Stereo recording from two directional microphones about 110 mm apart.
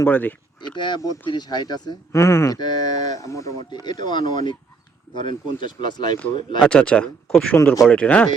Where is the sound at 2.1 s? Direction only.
25° left (ahead or behind).